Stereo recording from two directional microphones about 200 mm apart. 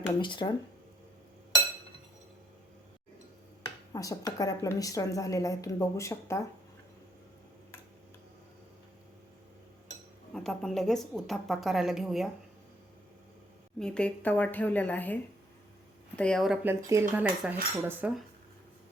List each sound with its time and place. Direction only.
0.2 s speech: 25° left (ahead or behind)
3.9 s a woman's voice: 15° left (ahead or behind)
10.3 s speech: centre (ahead or behind)
13.7 s a woman's voice: 5° left (ahead or behind)